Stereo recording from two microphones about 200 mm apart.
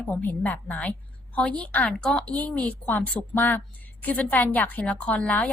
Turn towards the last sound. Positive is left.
turn(degrees=5)  # may be behind; listen again after turning